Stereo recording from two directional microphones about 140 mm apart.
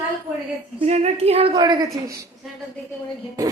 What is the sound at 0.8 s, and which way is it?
Speech, 50° right (ahead or behind).